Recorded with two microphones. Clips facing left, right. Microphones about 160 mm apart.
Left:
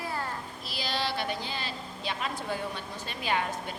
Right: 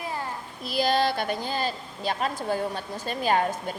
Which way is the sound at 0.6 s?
50° right (ahead or behind).